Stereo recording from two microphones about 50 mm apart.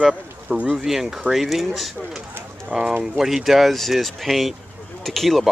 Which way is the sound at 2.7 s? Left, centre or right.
Right.